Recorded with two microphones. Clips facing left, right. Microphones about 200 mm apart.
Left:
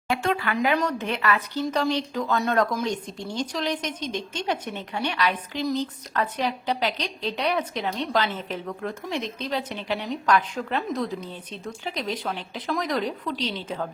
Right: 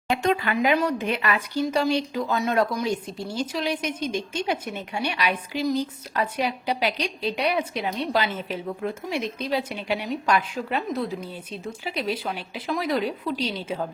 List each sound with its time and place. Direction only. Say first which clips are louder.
0.1 s a woman's voice: right 2 dB; 20° right (ahead or behind)